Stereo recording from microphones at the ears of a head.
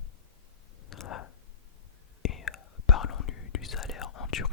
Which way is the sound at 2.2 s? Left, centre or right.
Left.